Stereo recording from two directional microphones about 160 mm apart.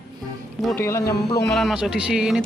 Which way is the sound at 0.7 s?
15° left (ahead or behind).